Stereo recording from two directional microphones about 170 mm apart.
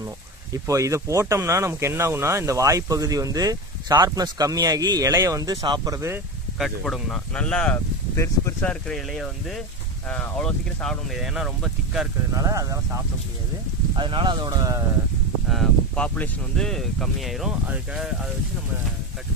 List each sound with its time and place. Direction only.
0.5 s speech: 20° right (ahead or behind)
6.6 s speech: centre (ahead or behind)
12.4 s speech: 20° right (ahead or behind)
13.9 s speech: 30° right (ahead or behind)
15.5 s speech: 5° left (ahead or behind)